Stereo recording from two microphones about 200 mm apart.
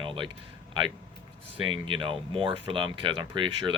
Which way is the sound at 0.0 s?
25° right (ahead or behind).